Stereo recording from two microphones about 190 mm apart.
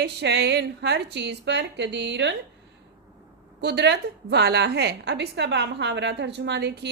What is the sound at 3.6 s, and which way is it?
A woman's voice, 65° right (ahead or behind).